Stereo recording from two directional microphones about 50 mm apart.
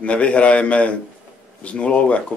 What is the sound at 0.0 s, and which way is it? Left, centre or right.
Speech, left.